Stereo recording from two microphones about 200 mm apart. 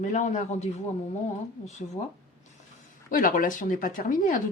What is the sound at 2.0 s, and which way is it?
Speech, 30° left (ahead or behind).